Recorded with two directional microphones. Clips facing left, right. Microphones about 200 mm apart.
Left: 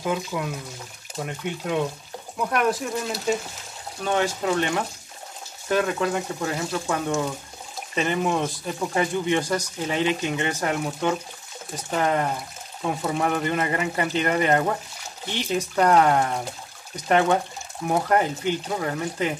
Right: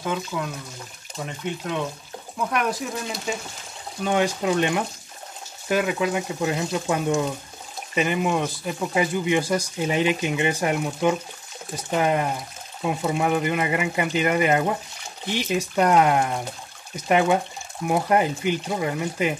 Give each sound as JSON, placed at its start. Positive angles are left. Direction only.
{"t": 0.0, "sound": "speech", "side_deg": 10}
{"t": 4.0, "sound": "speech", "side_deg": -15}